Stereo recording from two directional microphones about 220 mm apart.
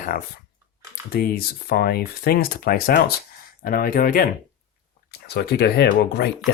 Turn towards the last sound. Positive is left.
turn(degrees=45)  # may be behind; listen again after turning